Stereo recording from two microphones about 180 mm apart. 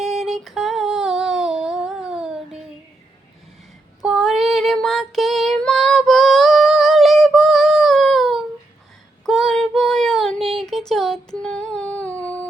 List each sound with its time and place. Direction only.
0.0 s female singing: centre (ahead or behind)
4.0 s child singing: centre (ahead or behind)